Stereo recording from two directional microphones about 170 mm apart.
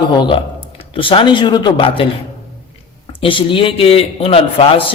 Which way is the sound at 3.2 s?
30° left (ahead or behind).